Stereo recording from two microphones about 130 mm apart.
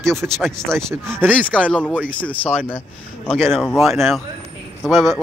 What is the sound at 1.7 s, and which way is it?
Speech, 10° left (ahead or behind).